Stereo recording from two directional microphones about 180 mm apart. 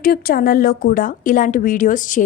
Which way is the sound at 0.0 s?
55° left (ahead or behind).